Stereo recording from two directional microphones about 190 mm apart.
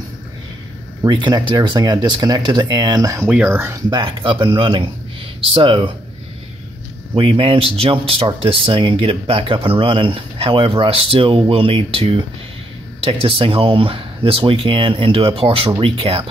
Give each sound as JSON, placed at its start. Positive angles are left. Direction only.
{"t": 1.0, "sound": "speech", "side_deg": -25}
{"t": 7.2, "sound": "speech", "side_deg": -30}